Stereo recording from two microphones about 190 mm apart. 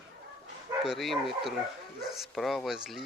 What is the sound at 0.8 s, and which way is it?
Speech, centre (ahead or behind).